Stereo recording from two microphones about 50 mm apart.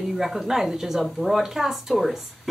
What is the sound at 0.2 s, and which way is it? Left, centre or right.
Speech, centre.